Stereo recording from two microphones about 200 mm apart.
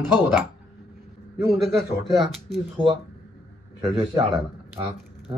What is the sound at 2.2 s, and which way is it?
Speech, centre (ahead or behind).